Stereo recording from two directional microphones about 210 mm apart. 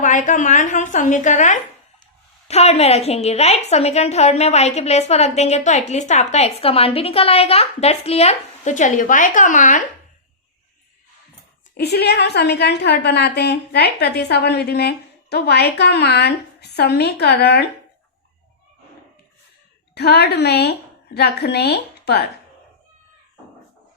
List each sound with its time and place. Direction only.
0.0 s a woman's voice: 35° left (ahead or behind)
11.8 s a woman's voice: 50° left (ahead or behind)
19.9 s a woman's voice: 50° left (ahead or behind)